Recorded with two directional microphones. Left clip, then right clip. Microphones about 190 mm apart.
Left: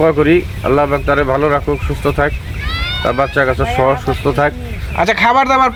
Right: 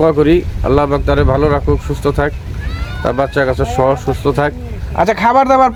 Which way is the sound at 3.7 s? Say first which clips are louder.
Right 2 dB; 25° right (ahead or behind).